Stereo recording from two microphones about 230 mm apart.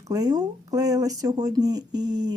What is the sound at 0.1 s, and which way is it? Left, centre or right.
A woman's voice, centre.